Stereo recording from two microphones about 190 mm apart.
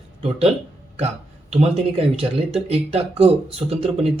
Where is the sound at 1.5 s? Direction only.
30° right (ahead or behind).